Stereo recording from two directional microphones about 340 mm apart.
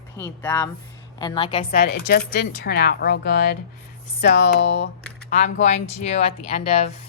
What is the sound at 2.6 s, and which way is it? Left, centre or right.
A woman's voice, left.